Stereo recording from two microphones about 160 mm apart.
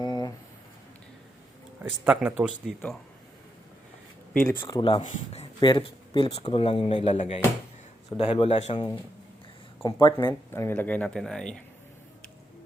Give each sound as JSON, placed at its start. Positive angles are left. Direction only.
{"t": 0.0, "sound": "a sound", "side_deg": 25}
{"t": 1.8, "sound": "speech", "side_deg": -10}
{"t": 4.4, "sound": "speech", "side_deg": 20}
{"t": 4.8, "sound": "speech", "side_deg": 35}
{"t": 5.5, "sound": "speech", "side_deg": 30}
{"t": 9.8, "sound": "speech", "side_deg": 25}
{"t": 10.5, "sound": "speech", "side_deg": 15}